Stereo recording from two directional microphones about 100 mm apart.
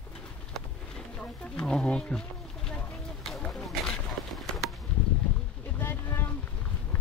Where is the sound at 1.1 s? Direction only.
10° left (ahead or behind).